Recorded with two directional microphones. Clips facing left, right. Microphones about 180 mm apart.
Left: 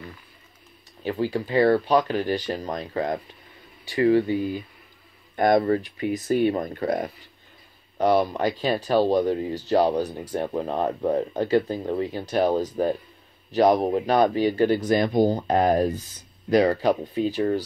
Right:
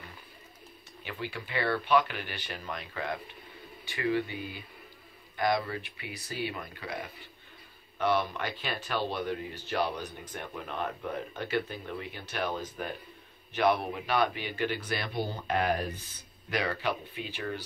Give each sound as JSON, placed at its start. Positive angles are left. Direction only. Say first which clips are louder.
{"t": 1.0, "sound": "speech", "louder": "left 13 dB", "side_deg": 40}
{"t": 5.3, "sound": "speech", "louder": "left 10 dB", "side_deg": 50}